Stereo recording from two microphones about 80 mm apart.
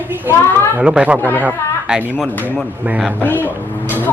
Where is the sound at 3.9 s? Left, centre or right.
Left.